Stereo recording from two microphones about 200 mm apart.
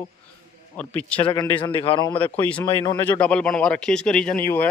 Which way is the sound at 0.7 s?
5° left (ahead or behind).